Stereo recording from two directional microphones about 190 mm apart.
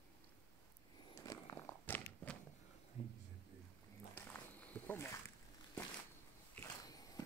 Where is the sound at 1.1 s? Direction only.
15° left (ahead or behind).